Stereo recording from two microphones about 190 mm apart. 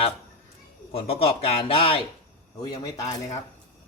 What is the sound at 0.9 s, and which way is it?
A man's voice, 30° left (ahead or behind).